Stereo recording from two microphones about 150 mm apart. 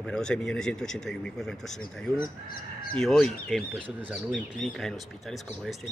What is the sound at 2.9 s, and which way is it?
Speech, 5° left (ahead or behind).